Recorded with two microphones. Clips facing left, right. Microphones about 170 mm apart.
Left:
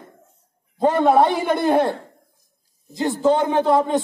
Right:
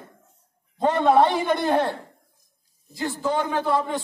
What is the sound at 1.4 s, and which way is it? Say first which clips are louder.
A man's voice: left 4 dB; 10° left (ahead or behind).